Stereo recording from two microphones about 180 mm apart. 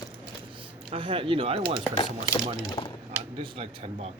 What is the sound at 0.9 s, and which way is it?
Speech, 25° right (ahead or behind).